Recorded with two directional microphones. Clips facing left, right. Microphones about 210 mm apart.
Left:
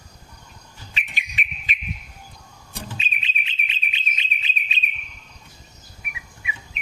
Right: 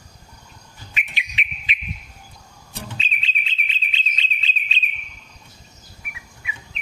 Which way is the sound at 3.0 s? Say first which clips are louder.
Right 1 dB; 15° left (ahead or behind).